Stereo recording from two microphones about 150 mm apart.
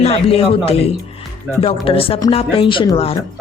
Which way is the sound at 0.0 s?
40° left (ahead or behind).